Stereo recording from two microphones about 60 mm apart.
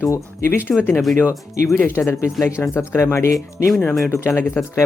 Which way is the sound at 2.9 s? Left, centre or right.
Left.